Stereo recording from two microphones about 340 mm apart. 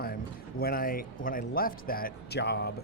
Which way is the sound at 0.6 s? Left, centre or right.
Left.